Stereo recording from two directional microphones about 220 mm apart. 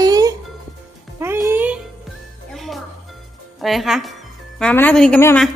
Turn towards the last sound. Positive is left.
turn(degrees=10)  # may be behind; listen again after turning